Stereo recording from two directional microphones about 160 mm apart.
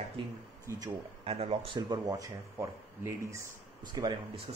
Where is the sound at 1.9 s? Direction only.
20° right (ahead or behind).